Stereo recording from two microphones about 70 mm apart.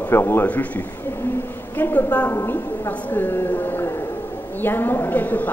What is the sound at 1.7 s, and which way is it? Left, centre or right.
Speech, left.